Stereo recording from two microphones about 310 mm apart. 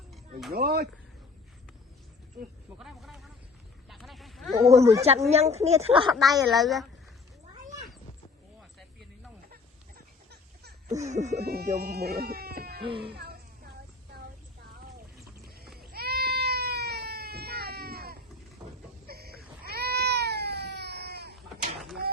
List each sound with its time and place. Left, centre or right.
0.1 s a sound: centre
0.5 s speech: right
2.7 s a sound: centre
4.8 s speech: centre
6.5 s a woman's voice: centre
10.6 s speech: right
12.8 s speech: centre
15.8 s cat: right
21.8 s a sound: centre